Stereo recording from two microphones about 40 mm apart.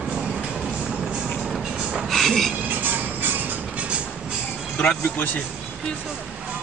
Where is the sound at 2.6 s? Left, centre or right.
Right.